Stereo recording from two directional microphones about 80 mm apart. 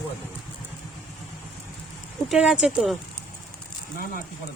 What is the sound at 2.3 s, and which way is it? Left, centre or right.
Speech, centre.